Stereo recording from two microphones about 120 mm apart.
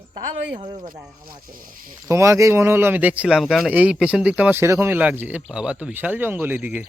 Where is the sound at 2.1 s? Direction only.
25° right (ahead or behind).